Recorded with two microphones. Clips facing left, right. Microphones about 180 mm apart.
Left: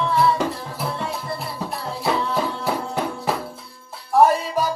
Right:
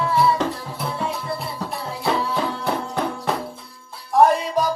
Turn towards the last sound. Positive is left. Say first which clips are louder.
# right 1 dB
turn(degrees=5)  # may be behind; listen again after turning